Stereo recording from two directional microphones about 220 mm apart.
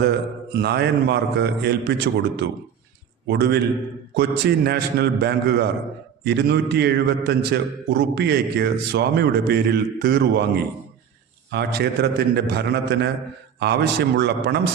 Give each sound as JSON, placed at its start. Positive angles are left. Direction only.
{"t": 0.0, "sound": "a man's voice", "side_deg": -45}